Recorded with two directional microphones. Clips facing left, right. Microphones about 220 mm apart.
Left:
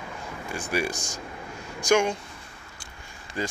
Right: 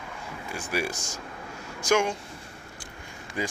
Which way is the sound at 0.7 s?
5° right (ahead or behind).